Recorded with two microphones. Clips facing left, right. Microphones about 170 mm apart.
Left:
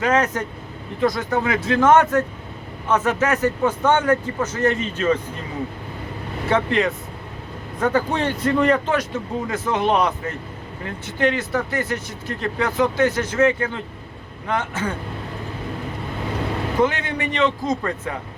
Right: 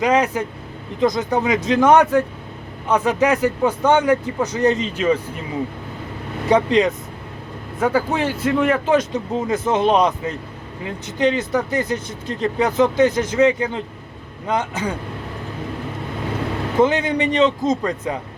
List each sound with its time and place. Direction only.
0.0 s speech: 10° right (ahead or behind)
6.5 s speech: 20° right (ahead or behind)
8.9 s speech: 20° right (ahead or behind)
16.8 s speech: 20° right (ahead or behind)